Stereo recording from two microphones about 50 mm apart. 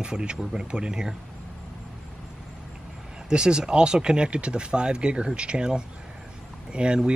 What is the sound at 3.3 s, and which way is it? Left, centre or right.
Speech, centre.